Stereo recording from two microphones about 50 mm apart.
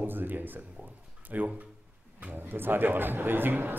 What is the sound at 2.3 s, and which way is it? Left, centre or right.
Speech, right.